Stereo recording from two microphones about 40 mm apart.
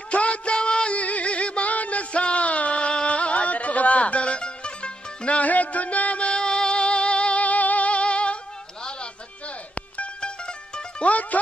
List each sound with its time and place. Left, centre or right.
0.1 s music: left
10.2 s music: left
11.1 s music: left